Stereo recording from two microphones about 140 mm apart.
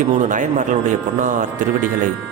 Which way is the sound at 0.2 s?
70° right (ahead or behind).